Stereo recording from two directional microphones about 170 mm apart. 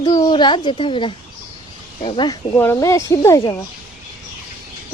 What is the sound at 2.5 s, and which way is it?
Speech, 15° left (ahead or behind).